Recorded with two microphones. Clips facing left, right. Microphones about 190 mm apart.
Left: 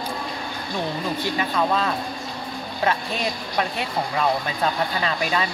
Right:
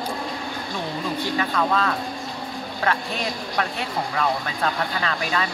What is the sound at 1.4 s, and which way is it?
Speech, 20° left (ahead or behind).